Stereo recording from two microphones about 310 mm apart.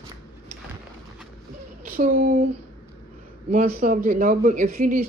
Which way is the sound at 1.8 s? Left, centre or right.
Right.